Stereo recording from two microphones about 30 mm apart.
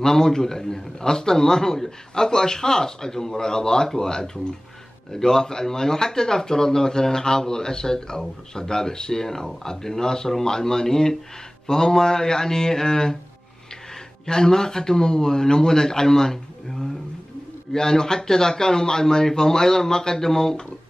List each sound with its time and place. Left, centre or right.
0.0 s speech: centre
14.2 s speech: left